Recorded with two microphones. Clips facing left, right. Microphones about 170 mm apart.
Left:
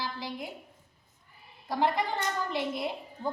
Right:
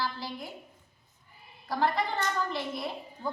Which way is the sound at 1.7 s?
20° left (ahead or behind).